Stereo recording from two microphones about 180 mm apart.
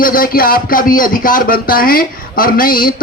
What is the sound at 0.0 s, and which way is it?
Speech, 50° left (ahead or behind).